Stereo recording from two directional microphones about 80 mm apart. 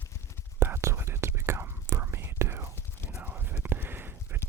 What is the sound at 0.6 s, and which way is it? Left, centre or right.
Whispering, right.